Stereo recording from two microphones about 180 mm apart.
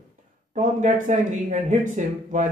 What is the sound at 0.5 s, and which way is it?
Speech, 40° right (ahead or behind).